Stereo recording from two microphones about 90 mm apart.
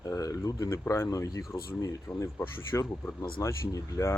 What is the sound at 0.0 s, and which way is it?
Speech, 35° left (ahead or behind).